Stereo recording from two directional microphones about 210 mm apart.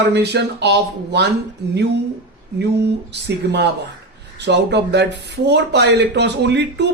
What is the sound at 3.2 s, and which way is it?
Speech, 55° right (ahead or behind).